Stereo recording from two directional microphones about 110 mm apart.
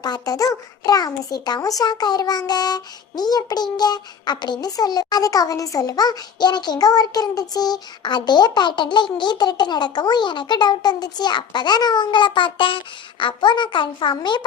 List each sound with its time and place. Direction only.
0.0 s a child's voice: 35° left (ahead or behind)